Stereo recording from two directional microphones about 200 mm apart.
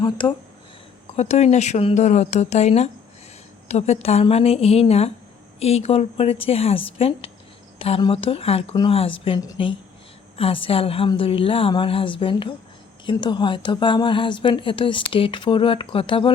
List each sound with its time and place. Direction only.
0.0 s a woman's voice: 25° left (ahead or behind)